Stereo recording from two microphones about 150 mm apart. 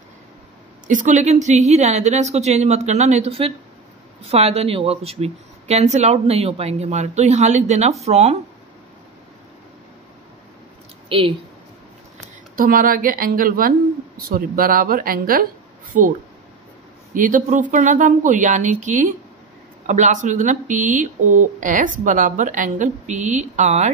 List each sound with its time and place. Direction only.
0.8 s speech: 55° right (ahead or behind)
11.1 s a woman's voice: 35° right (ahead or behind)
12.5 s speech: 70° right (ahead or behind)
15.9 s speech: 60° right (ahead or behind)